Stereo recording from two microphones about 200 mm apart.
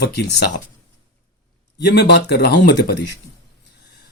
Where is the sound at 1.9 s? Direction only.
55° left (ahead or behind).